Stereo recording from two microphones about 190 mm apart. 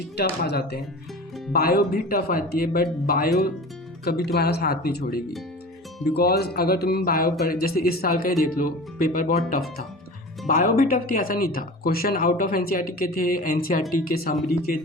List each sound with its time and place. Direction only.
0.2 s speech: 60° left (ahead or behind)
10.4 s speech: 50° left (ahead or behind)